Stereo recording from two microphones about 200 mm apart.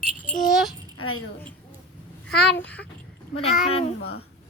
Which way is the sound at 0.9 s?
90° left.